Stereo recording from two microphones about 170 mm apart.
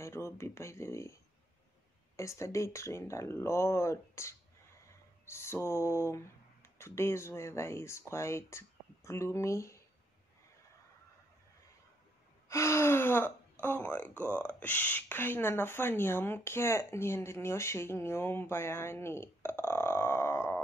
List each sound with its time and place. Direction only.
0.0 s speech: 15° left (ahead or behind)
12.4 s speech: 15° left (ahead or behind)